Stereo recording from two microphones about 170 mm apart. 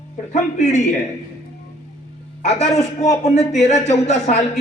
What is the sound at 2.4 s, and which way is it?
A man's voice, 40° left (ahead or behind).